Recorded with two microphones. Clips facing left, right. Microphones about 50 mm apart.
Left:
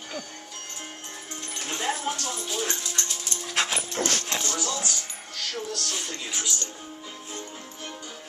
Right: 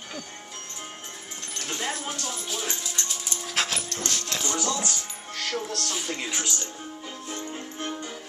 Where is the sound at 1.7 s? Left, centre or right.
Centre.